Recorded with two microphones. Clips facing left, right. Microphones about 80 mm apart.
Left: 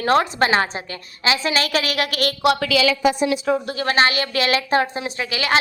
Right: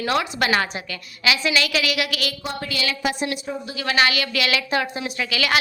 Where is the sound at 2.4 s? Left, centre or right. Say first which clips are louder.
Left 12 dB; left.